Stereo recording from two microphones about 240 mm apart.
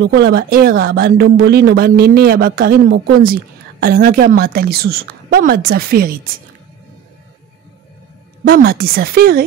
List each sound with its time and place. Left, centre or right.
0.0 s speech: right
8.5 s speech: right